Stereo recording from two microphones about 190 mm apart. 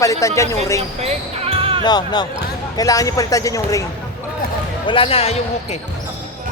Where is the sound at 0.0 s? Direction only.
15° left (ahead or behind).